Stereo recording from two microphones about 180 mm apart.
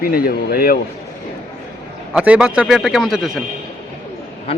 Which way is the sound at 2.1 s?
5° right (ahead or behind).